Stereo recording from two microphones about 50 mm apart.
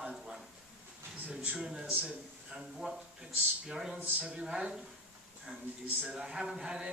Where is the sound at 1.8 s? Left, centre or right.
Right.